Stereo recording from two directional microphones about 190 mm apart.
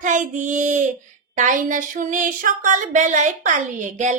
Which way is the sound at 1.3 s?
40° right (ahead or behind).